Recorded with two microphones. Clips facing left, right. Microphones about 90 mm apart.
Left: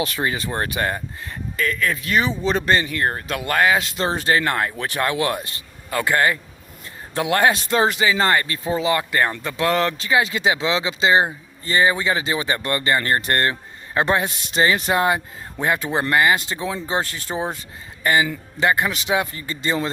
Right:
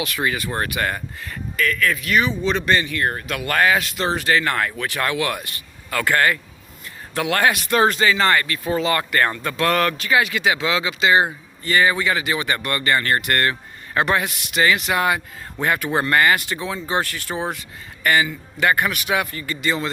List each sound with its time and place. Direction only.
0.0 s speech: 30° left (ahead or behind)
7.9 s speech: 15° left (ahead or behind)
8.2 s a man's voice: 25° left (ahead or behind)